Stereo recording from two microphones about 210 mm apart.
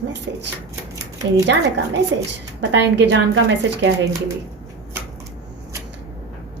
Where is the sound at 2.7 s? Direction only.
55° right (ahead or behind).